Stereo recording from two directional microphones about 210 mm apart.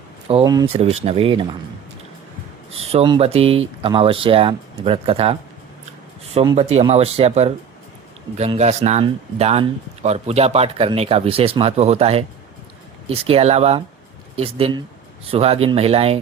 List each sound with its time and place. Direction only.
0.3 s speech: 25° right (ahead or behind)
0.7 s speech: 30° right (ahead or behind)
2.9 s speech: 25° right (ahead or behind)